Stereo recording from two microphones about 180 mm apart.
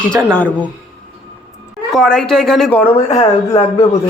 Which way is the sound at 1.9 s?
5° left (ahead or behind).